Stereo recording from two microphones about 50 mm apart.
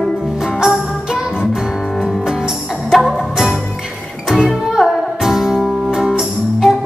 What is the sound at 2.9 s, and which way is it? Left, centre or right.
Music, centre.